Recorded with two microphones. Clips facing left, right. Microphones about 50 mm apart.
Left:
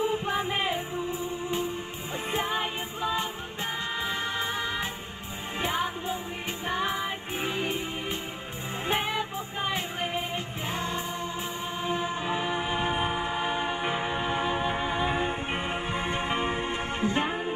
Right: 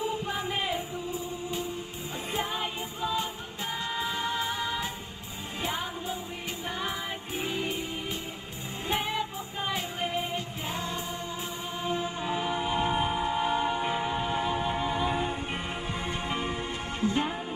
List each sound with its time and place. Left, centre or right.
0.0 s music: left
2.3 s music: left